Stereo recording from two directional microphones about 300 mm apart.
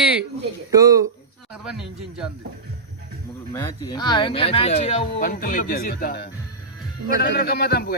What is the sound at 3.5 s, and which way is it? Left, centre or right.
Speech, centre.